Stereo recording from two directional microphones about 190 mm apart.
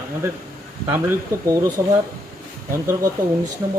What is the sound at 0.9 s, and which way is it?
Speech, 15° right (ahead or behind).